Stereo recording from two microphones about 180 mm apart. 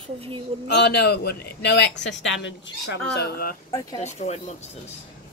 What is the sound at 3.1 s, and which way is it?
Speech, 60° left (ahead or behind).